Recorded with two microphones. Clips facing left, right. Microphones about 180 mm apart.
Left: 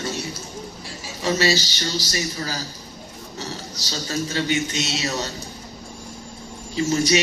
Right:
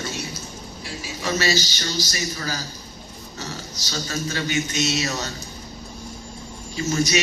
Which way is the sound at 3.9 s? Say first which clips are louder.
Left 2 dB; 30° left (ahead or behind).